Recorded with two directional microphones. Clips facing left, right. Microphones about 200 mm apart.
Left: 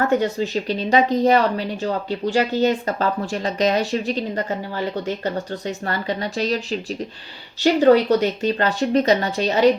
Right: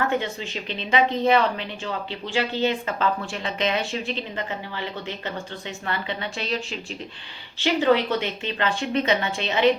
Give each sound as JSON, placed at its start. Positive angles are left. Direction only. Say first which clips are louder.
{"t": 0.1, "sound": "speech", "louder": "left 7 dB", "side_deg": 40}